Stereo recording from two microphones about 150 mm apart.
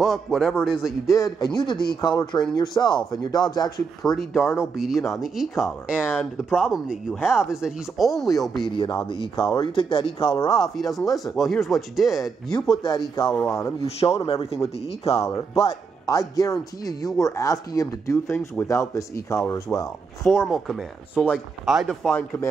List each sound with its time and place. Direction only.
0.0 s speech: centre (ahead or behind)
1.0 s speech: 20° left (ahead or behind)
4.0 s speech: centre (ahead or behind)
8.6 s speech: 30° left (ahead or behind)
10.6 s speech: centre (ahead or behind)
13.3 s speech: 15° left (ahead or behind)
13.8 s speech: 40° left (ahead or behind)
15.2 s speech: 20° left (ahead or behind)
20.2 s speech: centre (ahead or behind)
22.1 s speech: 15° left (ahead or behind)